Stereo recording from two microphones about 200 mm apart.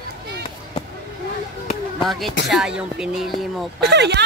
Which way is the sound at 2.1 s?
Centre (ahead or behind).